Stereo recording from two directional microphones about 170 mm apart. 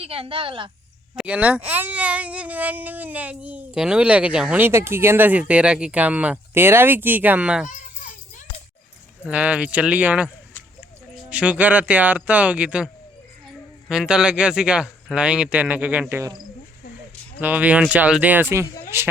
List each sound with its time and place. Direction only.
0.0 s a woman's voice: 35° right (ahead or behind)
1.1 s speech: 5° right (ahead or behind)
9.2 s speech: 5° right (ahead or behind)
17.4 s speech: 10° right (ahead or behind)